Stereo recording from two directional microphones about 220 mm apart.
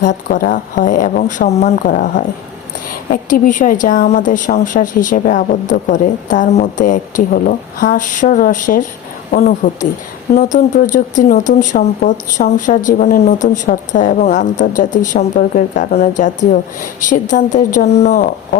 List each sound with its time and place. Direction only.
0.0 s speech: 40° left (ahead or behind)